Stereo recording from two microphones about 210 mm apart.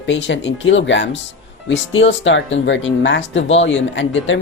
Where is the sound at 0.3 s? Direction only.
60° left (ahead or behind).